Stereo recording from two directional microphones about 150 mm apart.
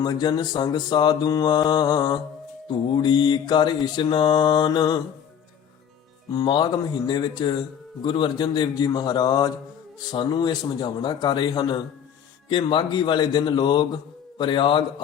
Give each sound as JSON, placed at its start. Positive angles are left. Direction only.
{"t": 0.0, "sound": "mantra", "side_deg": 30}
{"t": 6.3, "sound": "mantra", "side_deg": 30}
{"t": 12.5, "sound": "speech", "side_deg": 30}